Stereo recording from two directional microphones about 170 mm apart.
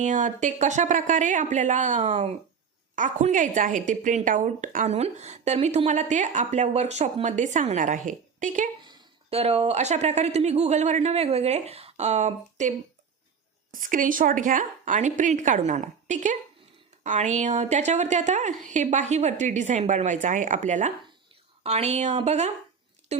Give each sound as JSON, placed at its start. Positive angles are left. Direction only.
{"t": 0.0, "sound": "a woman's voice", "side_deg": -45}
{"t": 8.8, "sound": "speech", "side_deg": -30}
{"t": 13.7, "sound": "a woman's voice", "side_deg": -50}